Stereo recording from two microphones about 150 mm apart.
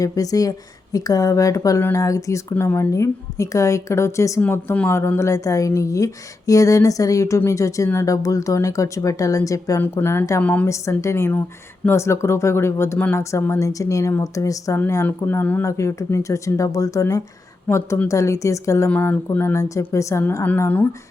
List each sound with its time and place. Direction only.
0.0 s a woman's voice: 25° left (ahead or behind)